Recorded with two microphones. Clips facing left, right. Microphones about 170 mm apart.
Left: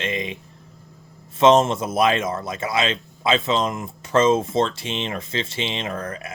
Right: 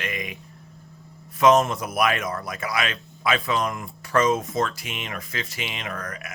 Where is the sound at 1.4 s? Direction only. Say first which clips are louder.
Left 3 dB; 25° left (ahead or behind).